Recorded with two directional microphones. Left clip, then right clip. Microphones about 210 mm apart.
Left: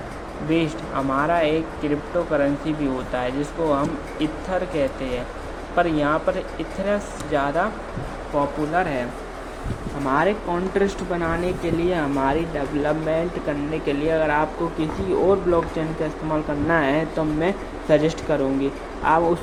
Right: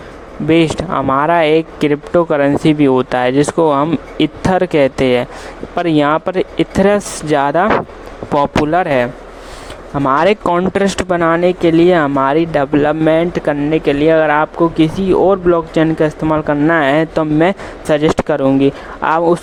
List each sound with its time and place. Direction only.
0.5 s speech: 50° right (ahead or behind)
10.1 s speech: 50° right (ahead or behind)